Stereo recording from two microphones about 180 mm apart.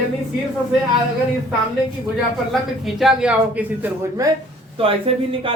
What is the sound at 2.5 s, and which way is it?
Speech, centre (ahead or behind).